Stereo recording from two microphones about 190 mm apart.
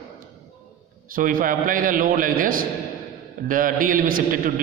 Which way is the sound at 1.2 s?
45° right (ahead or behind).